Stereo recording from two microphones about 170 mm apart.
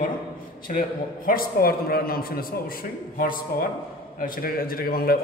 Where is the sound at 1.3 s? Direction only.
60° left (ahead or behind).